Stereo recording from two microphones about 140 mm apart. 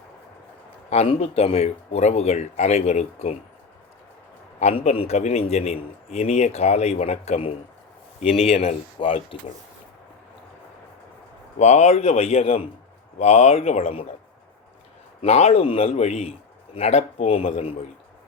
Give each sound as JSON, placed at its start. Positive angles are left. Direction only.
{"t": 0.9, "sound": "a man's voice", "side_deg": 45}
{"t": 4.6, "sound": "a man's voice", "side_deg": 50}
{"t": 11.6, "sound": "a man's voice", "side_deg": 50}
{"t": 15.2, "sound": "a man's voice", "side_deg": 45}